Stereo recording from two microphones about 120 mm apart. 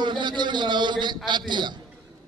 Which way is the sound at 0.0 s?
40° right (ahead or behind).